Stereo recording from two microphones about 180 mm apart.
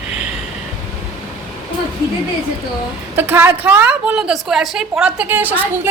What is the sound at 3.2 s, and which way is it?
A woman's voice, 10° right (ahead or behind).